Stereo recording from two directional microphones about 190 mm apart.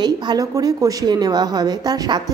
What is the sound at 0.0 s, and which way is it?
A woman's voice, 20° right (ahead or behind).